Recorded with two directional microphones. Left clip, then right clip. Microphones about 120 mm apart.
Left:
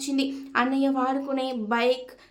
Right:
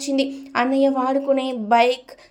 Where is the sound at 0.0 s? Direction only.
25° right (ahead or behind).